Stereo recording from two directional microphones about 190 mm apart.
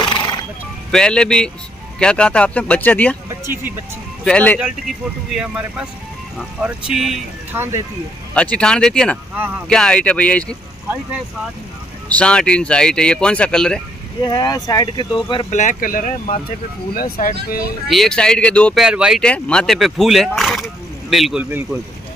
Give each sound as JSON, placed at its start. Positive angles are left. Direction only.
{"t": 0.0, "sound": "music", "side_deg": 25}
{"t": 0.9, "sound": "speech", "side_deg": 5}
{"t": 4.2, "sound": "speech", "side_deg": 5}
{"t": 5.3, "sound": "speech", "side_deg": -5}
{"t": 7.5, "sound": "speech", "side_deg": -15}
{"t": 8.4, "sound": "speech", "side_deg": 5}
{"t": 12.2, "sound": "speech", "side_deg": 5}
{"t": 14.2, "sound": "speech", "side_deg": 20}
{"t": 15.5, "sound": "speech", "side_deg": 45}
{"t": 17.8, "sound": "speech", "side_deg": 0}